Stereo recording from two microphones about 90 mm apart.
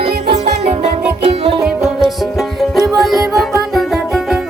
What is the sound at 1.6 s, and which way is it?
Music, 5° right (ahead or behind).